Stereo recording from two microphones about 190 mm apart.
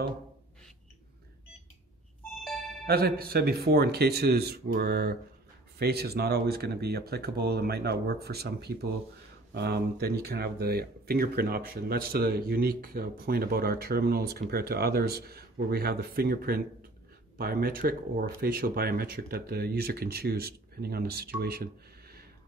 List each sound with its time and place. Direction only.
2.9 s speech: 55° right (ahead or behind)